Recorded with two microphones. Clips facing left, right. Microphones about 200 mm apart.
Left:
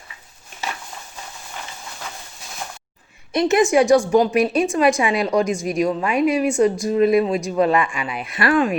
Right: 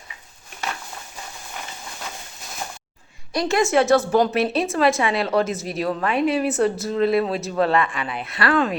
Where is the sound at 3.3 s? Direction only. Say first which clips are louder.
Left 3 dB; 20° left (ahead or behind).